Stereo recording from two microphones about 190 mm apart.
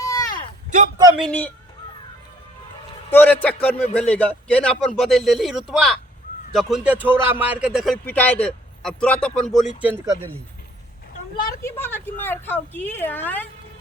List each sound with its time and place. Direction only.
0.0 s a sound: 15° left (ahead or behind)
1.2 s a man's voice: 5° left (ahead or behind)
3.1 s a woman's voice: 10° left (ahead or behind)
11.4 s a woman's voice: 10° left (ahead or behind)